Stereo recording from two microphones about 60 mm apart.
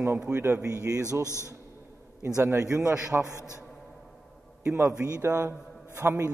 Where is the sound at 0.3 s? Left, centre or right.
Right.